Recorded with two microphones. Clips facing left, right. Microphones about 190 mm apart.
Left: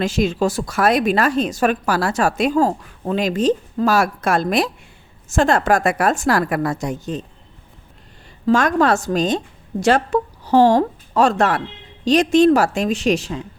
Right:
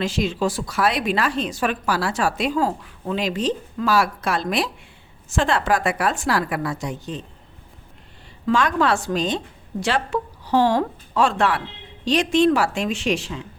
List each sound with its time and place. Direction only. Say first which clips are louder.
0.0 s a woman's voice: left 4 dB; 45° left (ahead or behind)
8.4 s a woman's voice: left 4 dB; 45° left (ahead or behind)